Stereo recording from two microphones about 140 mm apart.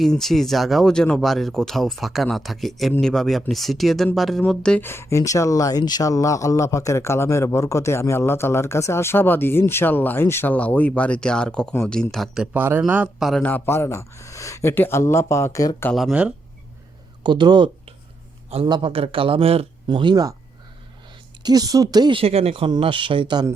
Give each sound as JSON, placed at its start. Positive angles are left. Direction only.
{"t": 0.0, "sound": "speech", "side_deg": 0}
{"t": 4.9, "sound": "speech", "side_deg": 20}
{"t": 12.1, "sound": "speech", "side_deg": 0}
{"t": 13.4, "sound": "speech", "side_deg": 15}
{"t": 15.9, "sound": "speech", "side_deg": 0}
{"t": 17.2, "sound": "speech", "side_deg": -30}
{"t": 21.4, "sound": "speech", "side_deg": -25}
{"t": 22.2, "sound": "speech", "side_deg": -45}